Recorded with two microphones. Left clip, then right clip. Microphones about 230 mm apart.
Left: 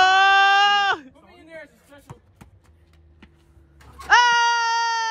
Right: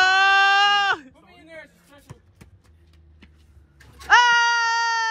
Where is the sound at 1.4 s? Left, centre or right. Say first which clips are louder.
Left 1 dB; centre.